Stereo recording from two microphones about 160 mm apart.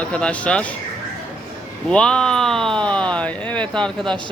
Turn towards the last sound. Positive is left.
turn(degrees=5)  # may be behind; listen again after turning